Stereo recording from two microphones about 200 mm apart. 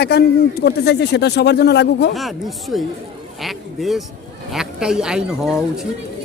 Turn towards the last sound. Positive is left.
turn(degrees=0)  # may be behind; listen again after turning